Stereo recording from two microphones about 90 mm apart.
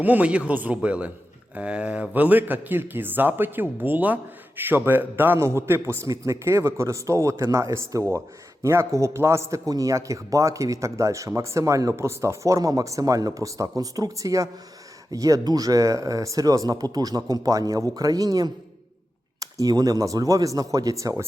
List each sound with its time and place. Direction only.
0.0 s a man's voice: 15° right (ahead or behind); by 21.2 s 35° right (ahead or behind)